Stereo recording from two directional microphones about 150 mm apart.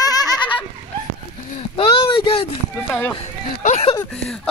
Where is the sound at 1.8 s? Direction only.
35° left (ahead or behind).